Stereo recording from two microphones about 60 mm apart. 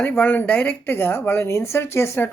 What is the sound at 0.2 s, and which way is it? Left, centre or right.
A woman's voice, left.